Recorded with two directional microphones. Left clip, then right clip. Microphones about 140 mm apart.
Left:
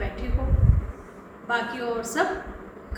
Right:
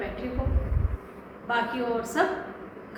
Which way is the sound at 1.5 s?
20° left (ahead or behind).